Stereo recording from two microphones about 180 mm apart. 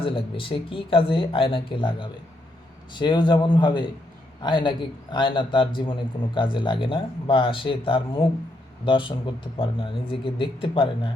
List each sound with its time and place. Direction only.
0.0 s speech: 30° left (ahead or behind)